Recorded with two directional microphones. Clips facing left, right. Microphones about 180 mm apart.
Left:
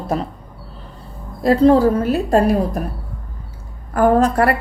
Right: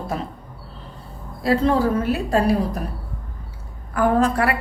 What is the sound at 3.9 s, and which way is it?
Speech, 40° left (ahead or behind).